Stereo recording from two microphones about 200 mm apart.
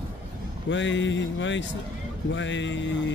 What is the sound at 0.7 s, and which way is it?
Speech, 65° left (ahead or behind).